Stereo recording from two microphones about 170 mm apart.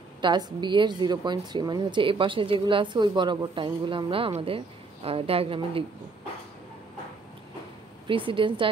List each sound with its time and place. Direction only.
0.2 s a woman's voice: 25° right (ahead or behind)
8.1 s a woman's voice: 30° right (ahead or behind)